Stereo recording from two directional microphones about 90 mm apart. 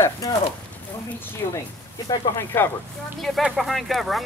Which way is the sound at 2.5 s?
25° left (ahead or behind).